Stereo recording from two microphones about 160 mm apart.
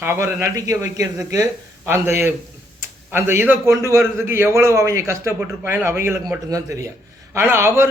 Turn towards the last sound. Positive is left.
turn(degrees=-15)  # may be behind; listen again after turning